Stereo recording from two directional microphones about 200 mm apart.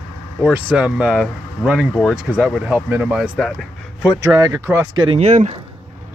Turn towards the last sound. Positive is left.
turn(degrees=-35)  # may be behind; listen again after turning